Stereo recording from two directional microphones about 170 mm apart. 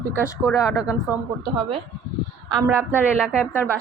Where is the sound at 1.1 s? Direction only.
15° right (ahead or behind).